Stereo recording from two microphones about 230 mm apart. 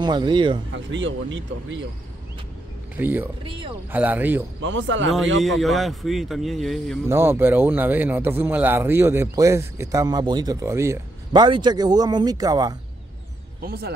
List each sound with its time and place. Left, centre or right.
0.0 s speech: centre
0.9 s speech: right
3.0 s speech: centre
3.4 s speech: right
3.9 s speech: centre
4.6 s speech: right
5.4 s speech: centre
7.1 s speech: centre
13.6 s speech: right